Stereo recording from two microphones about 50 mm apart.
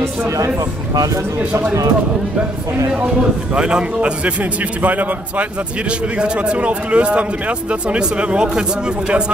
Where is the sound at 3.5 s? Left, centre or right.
Centre.